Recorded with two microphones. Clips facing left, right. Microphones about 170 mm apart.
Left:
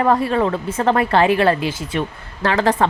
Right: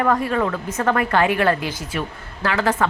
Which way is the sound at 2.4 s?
35° left (ahead or behind).